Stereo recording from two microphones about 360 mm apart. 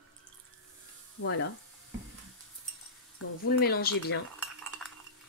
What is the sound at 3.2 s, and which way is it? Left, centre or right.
Speech, left.